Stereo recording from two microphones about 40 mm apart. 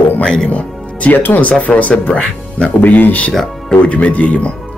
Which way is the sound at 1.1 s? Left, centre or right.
Left.